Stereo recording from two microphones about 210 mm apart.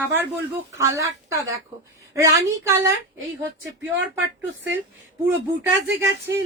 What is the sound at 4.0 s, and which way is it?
Speech, 65° right (ahead or behind).